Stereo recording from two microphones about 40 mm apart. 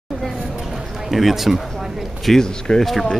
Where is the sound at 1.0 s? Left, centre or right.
Centre.